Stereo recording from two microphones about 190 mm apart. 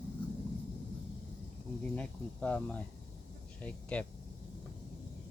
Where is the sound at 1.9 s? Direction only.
5° left (ahead or behind).